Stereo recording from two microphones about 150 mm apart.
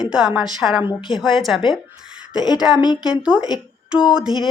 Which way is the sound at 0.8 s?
30° left (ahead or behind).